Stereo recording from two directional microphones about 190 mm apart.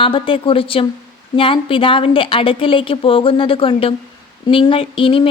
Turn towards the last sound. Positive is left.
turn(degrees=30)  # may be behind; listen again after turning